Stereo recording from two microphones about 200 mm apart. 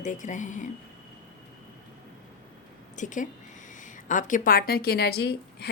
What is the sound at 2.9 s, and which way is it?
A woman's voice, 40° left (ahead or behind).